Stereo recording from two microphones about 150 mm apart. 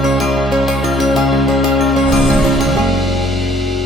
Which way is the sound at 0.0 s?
Centre (ahead or behind).